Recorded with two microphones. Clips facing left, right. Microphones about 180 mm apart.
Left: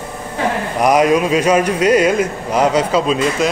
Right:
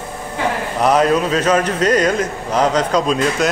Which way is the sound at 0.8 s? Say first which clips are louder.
Left 2 dB; 10° left (ahead or behind).